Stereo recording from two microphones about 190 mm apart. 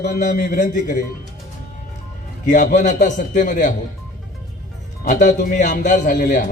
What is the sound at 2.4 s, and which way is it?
A man's voice, 45° left (ahead or behind).